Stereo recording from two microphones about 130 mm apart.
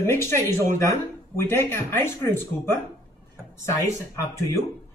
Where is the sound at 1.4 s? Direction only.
20° left (ahead or behind).